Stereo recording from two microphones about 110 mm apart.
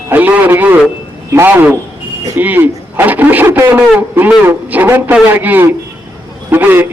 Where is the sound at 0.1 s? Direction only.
15° right (ahead or behind).